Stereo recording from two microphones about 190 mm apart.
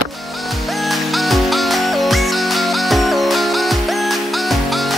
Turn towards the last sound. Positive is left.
turn(degrees=0)  # may be behind; listen again after turning